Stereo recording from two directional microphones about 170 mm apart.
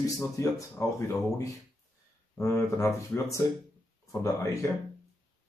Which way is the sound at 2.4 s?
15° left (ahead or behind).